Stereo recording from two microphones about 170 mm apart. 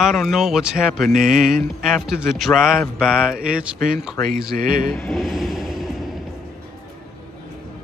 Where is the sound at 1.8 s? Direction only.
Centre (ahead or behind).